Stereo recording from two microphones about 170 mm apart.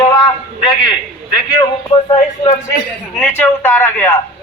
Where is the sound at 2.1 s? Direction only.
30° left (ahead or behind).